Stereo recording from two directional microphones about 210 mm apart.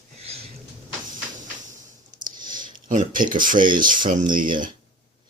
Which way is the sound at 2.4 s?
40° right (ahead or behind).